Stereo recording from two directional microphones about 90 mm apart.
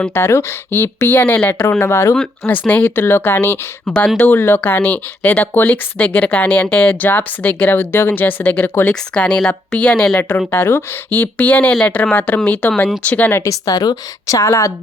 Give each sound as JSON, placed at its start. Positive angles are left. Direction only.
{"t": 0.1, "sound": "speech", "side_deg": 30}
{"t": 8.9, "sound": "speech", "side_deg": 10}
{"t": 13.4, "sound": "a woman's voice", "side_deg": 40}